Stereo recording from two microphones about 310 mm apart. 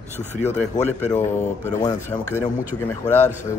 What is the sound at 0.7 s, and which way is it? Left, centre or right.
Speech, left.